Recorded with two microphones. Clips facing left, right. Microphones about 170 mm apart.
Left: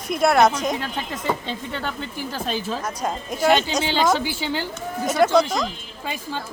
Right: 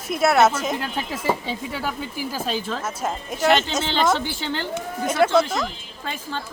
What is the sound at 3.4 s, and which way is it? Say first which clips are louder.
A woman's voice: left 1 dB; 10° left (ahead or behind).